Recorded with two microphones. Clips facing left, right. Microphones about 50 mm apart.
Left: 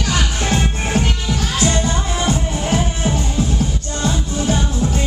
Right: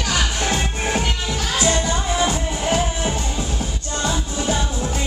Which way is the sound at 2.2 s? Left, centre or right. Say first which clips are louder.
Left 1 dB; centre.